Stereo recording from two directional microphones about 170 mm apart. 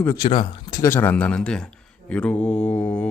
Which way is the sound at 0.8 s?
10° left (ahead or behind).